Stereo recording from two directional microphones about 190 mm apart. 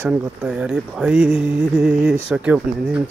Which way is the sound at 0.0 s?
5° right (ahead or behind).